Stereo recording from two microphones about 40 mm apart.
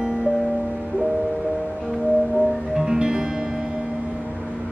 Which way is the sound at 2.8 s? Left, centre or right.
Centre.